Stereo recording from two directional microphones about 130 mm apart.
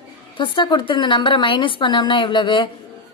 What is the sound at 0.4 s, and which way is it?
A woman's voice, 35° left (ahead or behind).